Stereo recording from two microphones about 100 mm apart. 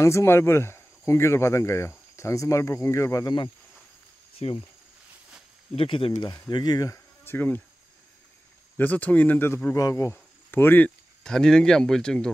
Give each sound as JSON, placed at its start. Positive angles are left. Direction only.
{"t": 0.0, "sound": "speech", "side_deg": 30}
{"t": 4.4, "sound": "speech", "side_deg": 70}
{"t": 5.8, "sound": "speech", "side_deg": 60}
{"t": 6.5, "sound": "speech", "side_deg": 45}
{"t": 7.2, "sound": "speech", "side_deg": 20}
{"t": 8.7, "sound": "speech", "side_deg": 15}
{"t": 9.8, "sound": "speech", "side_deg": 35}
{"t": 10.1, "sound": "cricket", "side_deg": 20}
{"t": 11.2, "sound": "speech", "side_deg": 5}